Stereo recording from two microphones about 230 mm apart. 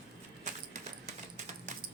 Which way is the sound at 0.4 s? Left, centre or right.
Right.